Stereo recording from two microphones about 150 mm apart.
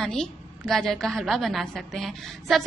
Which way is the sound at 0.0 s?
5° left (ahead or behind).